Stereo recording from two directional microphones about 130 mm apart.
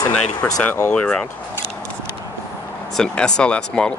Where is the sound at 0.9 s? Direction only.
10° left (ahead or behind).